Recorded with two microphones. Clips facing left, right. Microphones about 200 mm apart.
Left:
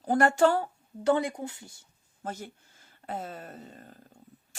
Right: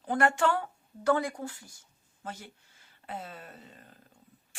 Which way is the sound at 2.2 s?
45° left (ahead or behind).